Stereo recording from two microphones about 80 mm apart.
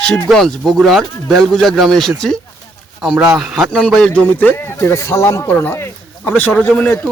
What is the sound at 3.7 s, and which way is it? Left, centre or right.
A man's voice, centre.